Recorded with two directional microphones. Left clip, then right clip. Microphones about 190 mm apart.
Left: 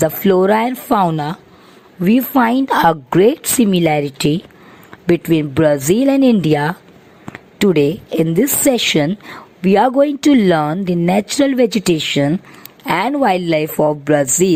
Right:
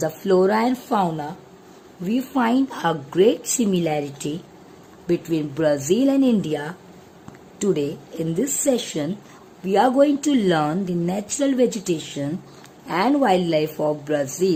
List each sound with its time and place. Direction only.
0.0 s a woman's voice: 40° left (ahead or behind)
2.0 s a woman's voice: 35° left (ahead or behind)